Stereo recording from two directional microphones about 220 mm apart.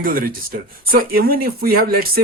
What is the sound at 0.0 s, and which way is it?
Speech, 40° right (ahead or behind).